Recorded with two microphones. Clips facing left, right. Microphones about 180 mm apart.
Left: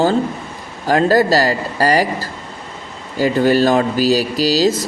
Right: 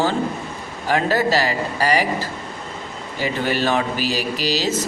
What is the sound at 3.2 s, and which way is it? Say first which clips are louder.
Speech: left 8 dB; 40° left (ahead or behind).